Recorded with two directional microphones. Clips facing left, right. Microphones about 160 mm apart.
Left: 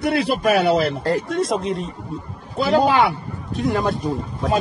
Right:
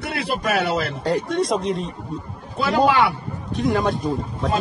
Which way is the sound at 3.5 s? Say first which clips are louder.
Even; centre (ahead or behind).